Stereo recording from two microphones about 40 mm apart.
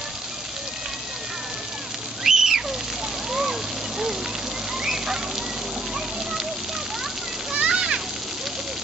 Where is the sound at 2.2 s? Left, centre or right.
Centre.